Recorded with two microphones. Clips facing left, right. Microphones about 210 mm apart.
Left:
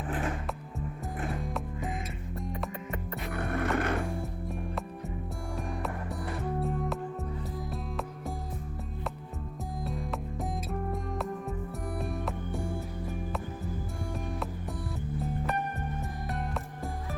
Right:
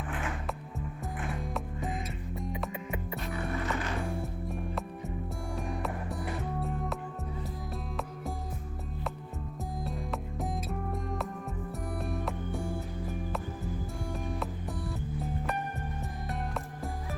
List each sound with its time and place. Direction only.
1.3 s music: centre (ahead or behind)
3.2 s music: 50° left (ahead or behind)
4.0 s music: centre (ahead or behind)
9.8 s music: centre (ahead or behind)